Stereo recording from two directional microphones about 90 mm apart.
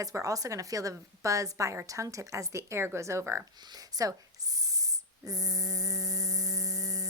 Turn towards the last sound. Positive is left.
turn(degrees=-40)  # may be behind; listen again after turning